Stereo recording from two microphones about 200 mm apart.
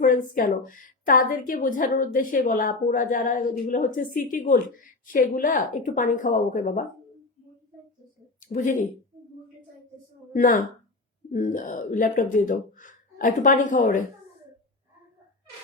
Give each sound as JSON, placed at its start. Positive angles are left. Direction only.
{"t": 0.0, "sound": "a woman's voice", "side_deg": 45}
{"t": 8.4, "sound": "a woman's voice", "side_deg": 40}
{"t": 10.3, "sound": "a woman's voice", "side_deg": 45}